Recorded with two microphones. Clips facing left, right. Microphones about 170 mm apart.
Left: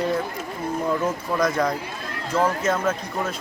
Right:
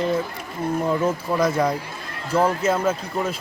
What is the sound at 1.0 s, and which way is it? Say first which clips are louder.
Speech: right 2 dB; 10° right (ahead or behind).